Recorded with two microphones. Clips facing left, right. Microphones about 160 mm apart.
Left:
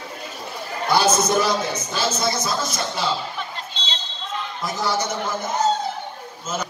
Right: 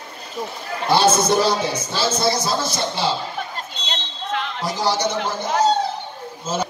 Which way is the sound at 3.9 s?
90° right.